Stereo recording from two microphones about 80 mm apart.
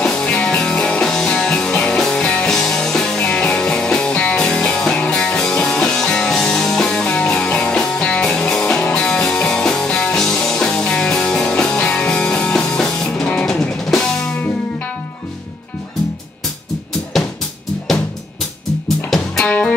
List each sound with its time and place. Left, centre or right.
0.0 s music: centre
13.5 s drum kit: centre
17.1 s music: centre
19.0 s music: centre
19.4 s music: centre